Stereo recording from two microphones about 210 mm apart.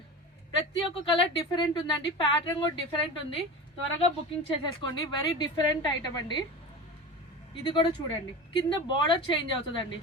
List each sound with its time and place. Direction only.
0.7 s a woman's voice: 25° left (ahead or behind)
7.6 s a woman's voice: 20° left (ahead or behind)